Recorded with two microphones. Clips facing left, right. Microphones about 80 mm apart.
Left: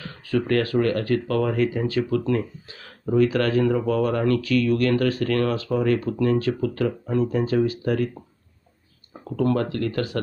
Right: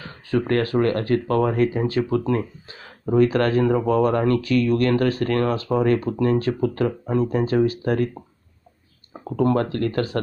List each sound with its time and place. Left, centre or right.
0.0 s speech: right
6.0 s speech: right
9.2 s speech: right